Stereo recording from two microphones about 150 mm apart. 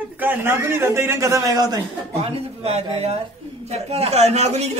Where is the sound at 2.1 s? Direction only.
45° right (ahead or behind).